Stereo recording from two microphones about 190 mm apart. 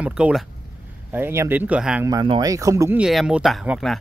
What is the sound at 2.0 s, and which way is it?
Speech, 20° right (ahead or behind).